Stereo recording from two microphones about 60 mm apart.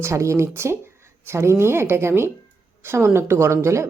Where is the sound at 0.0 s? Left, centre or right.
Right.